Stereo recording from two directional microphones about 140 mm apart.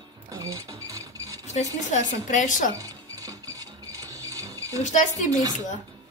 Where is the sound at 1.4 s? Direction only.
55° left (ahead or behind).